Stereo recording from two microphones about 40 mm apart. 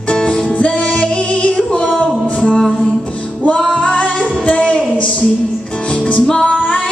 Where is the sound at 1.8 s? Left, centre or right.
Right.